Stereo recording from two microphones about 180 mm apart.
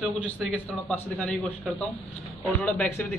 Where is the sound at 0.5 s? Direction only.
5° left (ahead or behind).